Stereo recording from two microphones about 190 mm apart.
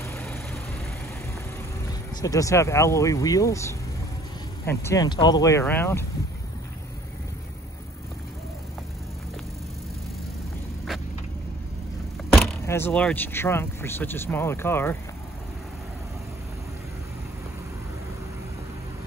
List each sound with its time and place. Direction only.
0.0 s vehicle: 15° left (ahead or behind)
2.2 s speech: 15° left (ahead or behind)
12.6 s speech: 10° left (ahead or behind)